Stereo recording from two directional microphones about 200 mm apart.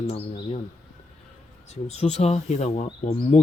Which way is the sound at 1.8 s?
35° left (ahead or behind).